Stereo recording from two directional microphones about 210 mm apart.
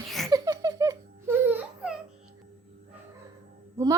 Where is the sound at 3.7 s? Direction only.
15° right (ahead or behind).